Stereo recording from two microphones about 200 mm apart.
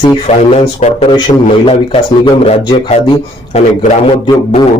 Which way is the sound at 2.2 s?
25° left (ahead or behind).